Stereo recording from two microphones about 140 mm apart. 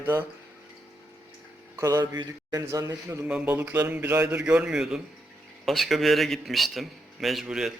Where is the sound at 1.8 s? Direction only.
25° right (ahead or behind).